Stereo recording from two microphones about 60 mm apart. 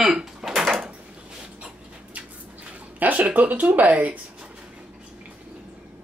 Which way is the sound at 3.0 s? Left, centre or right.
Right.